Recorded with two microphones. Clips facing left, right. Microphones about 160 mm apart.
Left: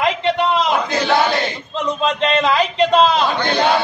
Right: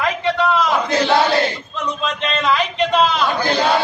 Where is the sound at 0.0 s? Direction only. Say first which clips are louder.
Left 1 dB; 20° left (ahead or behind).